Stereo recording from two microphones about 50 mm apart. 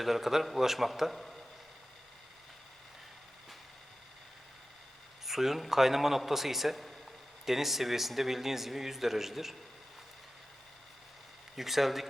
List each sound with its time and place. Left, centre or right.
0.0 s a man's voice: centre
5.2 s a man's voice: centre
11.5 s a man's voice: centre